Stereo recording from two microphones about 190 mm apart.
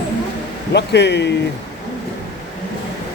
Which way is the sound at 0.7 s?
65° left (ahead or behind).